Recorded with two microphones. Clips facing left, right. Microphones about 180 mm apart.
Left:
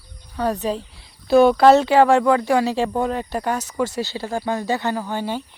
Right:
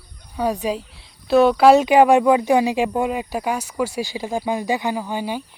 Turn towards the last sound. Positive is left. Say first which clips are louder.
# even
turn(degrees=-10)  # may be behind; listen again after turning